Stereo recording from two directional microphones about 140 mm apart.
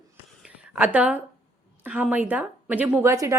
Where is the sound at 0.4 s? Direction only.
5° right (ahead or behind).